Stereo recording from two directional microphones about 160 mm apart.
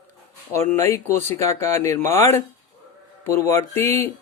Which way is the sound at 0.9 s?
15° left (ahead or behind).